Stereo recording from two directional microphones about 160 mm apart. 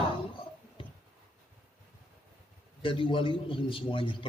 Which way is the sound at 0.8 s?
30° left (ahead or behind).